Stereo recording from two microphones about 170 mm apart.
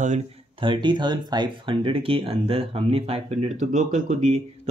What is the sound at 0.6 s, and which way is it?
Speech, 30° right (ahead or behind).